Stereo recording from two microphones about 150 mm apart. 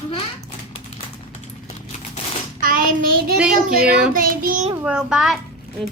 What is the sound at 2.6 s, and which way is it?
Child singing, 65° right (ahead or behind).